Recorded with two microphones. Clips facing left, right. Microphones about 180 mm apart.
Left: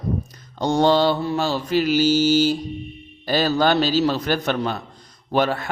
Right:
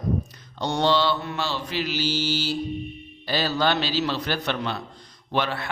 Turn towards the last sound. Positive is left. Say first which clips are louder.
# left 6 dB
turn(degrees=45)  # may be behind; listen again after turning